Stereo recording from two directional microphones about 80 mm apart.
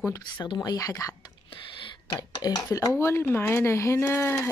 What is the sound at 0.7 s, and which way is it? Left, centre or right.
Speech, left.